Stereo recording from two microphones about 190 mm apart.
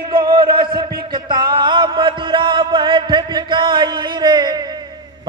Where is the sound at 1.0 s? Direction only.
25° right (ahead or behind).